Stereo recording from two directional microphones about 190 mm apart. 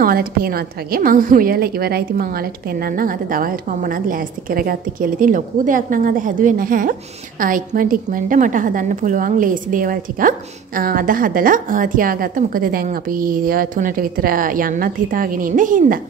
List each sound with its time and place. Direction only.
0.0 s a woman's voice: 50° right (ahead or behind)